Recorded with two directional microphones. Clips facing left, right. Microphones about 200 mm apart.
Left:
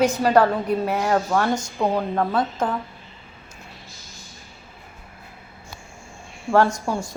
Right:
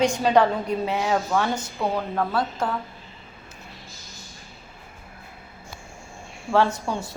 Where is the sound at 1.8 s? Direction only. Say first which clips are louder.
Left 3 dB; 10° left (ahead or behind).